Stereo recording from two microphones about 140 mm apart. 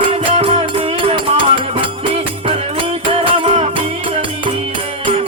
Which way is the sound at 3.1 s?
40° right (ahead or behind).